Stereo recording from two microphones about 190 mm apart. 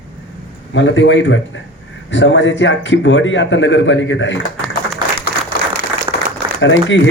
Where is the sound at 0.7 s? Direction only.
75° left (ahead or behind).